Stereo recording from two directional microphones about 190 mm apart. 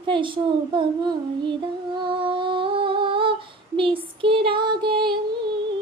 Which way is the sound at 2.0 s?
25° right (ahead or behind).